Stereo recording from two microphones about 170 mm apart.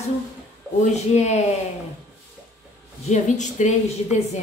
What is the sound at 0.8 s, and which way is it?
Speech, 40° left (ahead or behind).